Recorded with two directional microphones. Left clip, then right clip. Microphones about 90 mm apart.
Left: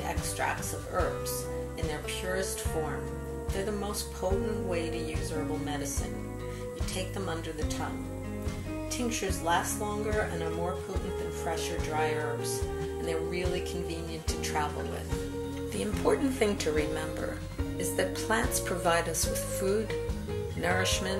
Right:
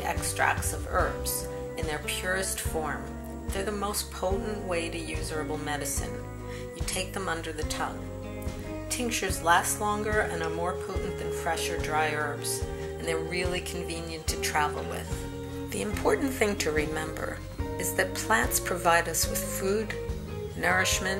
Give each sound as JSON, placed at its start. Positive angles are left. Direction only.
{"t": 0.0, "sound": "music", "side_deg": -35}
{"t": 1.9, "sound": "speech", "side_deg": -35}
{"t": 3.5, "sound": "speech", "side_deg": -30}
{"t": 7.0, "sound": "speech", "side_deg": -30}
{"t": 8.9, "sound": "speech", "side_deg": -30}
{"t": 15.8, "sound": "speech", "side_deg": -25}